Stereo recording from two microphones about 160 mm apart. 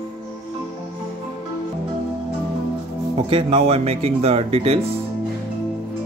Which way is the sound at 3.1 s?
30° right (ahead or behind).